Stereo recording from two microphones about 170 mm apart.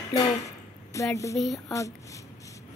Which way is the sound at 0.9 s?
20° left (ahead or behind).